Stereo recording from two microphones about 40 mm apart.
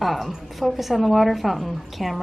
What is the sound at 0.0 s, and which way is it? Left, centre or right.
A woman's voice, centre.